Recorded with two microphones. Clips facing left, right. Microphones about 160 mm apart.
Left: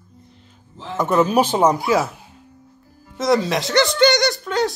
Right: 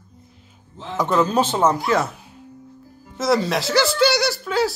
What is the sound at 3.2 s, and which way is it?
A man's voice, centre (ahead or behind).